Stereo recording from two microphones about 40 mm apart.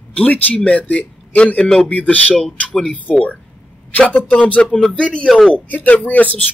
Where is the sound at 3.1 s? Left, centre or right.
Left.